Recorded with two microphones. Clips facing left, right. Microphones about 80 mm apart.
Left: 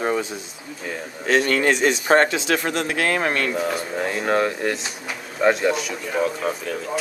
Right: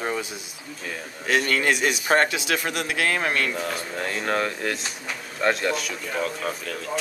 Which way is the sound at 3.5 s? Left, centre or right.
Centre.